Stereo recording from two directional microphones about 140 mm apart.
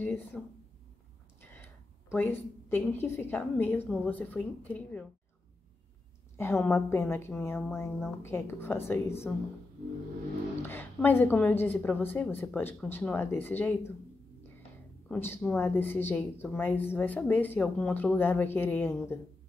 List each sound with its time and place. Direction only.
0.0 s speech: 15° left (ahead or behind)
1.4 s a sound: 15° left (ahead or behind)
2.1 s a woman's voice: 15° left (ahead or behind)
6.3 s a woman's voice: 15° left (ahead or behind)
10.6 s a woman's voice: 15° left (ahead or behind)
15.0 s a woman's voice: 15° left (ahead or behind)